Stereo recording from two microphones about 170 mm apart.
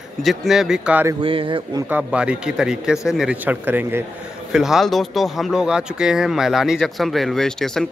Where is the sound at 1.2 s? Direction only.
30° right (ahead or behind).